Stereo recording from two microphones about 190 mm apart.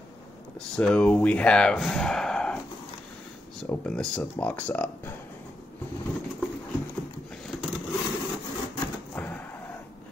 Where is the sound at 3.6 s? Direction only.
5° left (ahead or behind).